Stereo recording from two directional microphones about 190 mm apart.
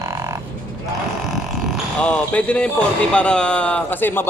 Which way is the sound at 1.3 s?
Centre (ahead or behind).